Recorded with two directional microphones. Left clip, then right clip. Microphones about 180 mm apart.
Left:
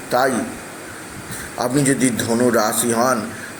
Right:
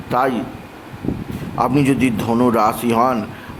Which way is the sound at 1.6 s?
15° right (ahead or behind).